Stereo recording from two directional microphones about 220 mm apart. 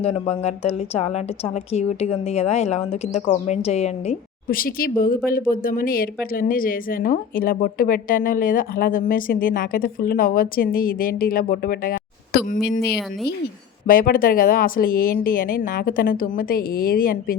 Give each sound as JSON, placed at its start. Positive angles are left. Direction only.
{"t": 0.0, "sound": "a woman's voice", "side_deg": 30}